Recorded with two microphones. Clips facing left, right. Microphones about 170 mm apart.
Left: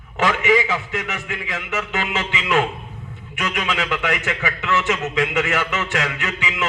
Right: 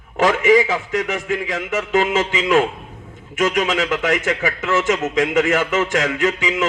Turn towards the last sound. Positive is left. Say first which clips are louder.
# right 7 dB
turn(degrees=-45)  # may be behind; listen again after turning